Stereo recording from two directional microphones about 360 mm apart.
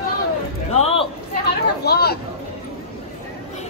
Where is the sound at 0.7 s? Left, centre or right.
Centre.